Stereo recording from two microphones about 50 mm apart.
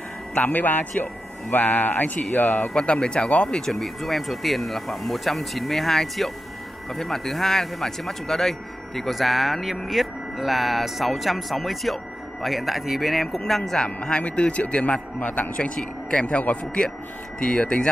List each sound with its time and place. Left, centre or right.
0.3 s speech: left
2.7 s a man's voice: centre
13.4 s speech: centre
14.0 s a man's voice: left
17.4 s a man's voice: centre